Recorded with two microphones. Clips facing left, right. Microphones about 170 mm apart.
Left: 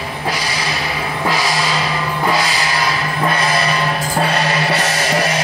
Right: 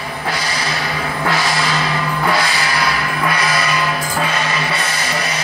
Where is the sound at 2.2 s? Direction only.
15° left (ahead or behind); by 5.2 s 40° left (ahead or behind).